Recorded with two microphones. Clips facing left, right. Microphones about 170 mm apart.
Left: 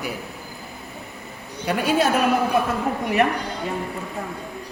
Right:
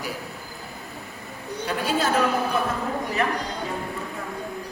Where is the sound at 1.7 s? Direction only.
65° left (ahead or behind).